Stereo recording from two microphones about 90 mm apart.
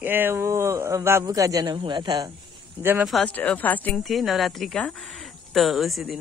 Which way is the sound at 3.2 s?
15° left (ahead or behind).